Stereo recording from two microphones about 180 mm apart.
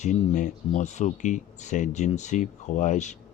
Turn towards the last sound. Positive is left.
turn(degrees=40)  # may be behind; listen again after turning